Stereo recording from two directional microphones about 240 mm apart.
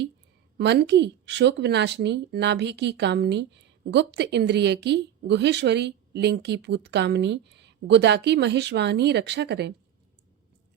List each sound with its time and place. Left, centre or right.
0.6 s speech: right